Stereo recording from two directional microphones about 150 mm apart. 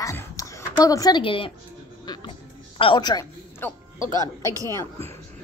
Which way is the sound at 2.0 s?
30° left (ahead or behind).